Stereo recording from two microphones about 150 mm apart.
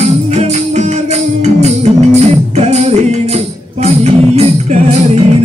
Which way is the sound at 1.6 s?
50° right (ahead or behind).